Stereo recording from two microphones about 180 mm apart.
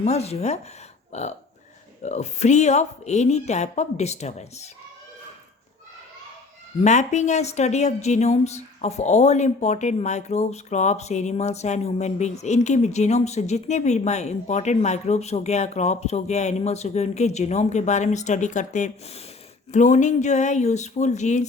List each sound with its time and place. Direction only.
0.0 s a woman's voice: 35° left (ahead or behind)
6.8 s a woman's voice: 40° left (ahead or behind)